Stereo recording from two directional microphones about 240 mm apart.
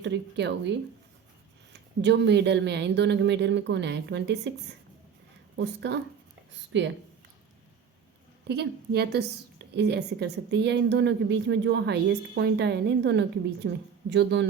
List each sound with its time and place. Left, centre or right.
0.0 s a woman's voice: right
1.7 s a woman's voice: right
5.5 s a woman's voice: right
8.4 s a woman's voice: right